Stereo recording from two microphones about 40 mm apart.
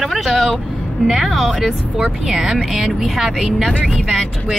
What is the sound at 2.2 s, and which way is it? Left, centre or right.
Speech, centre.